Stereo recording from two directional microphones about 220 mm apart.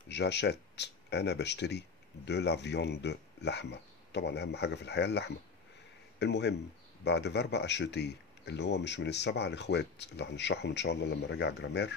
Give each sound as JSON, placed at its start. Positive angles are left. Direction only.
{"t": 0.1, "sound": "speech", "side_deg": 50}